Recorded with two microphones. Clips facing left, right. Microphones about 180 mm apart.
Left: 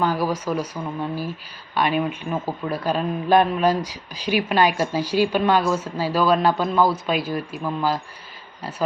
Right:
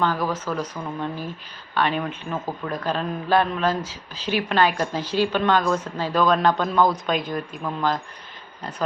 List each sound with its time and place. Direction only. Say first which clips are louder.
0.0 s a man's voice: left 2 dB; 10° left (ahead or behind)